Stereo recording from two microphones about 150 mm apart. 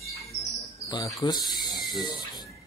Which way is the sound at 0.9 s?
30° left (ahead or behind).